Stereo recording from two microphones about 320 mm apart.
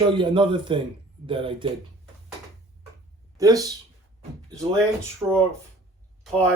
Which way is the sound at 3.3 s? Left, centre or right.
Centre.